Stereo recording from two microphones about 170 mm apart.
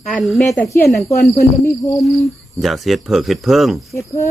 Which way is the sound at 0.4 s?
20° left (ahead or behind).